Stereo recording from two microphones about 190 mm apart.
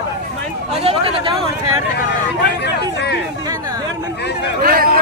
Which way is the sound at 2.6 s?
65° left (ahead or behind).